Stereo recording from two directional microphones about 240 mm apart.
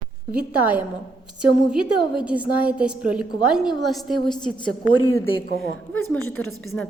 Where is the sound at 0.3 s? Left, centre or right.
Centre.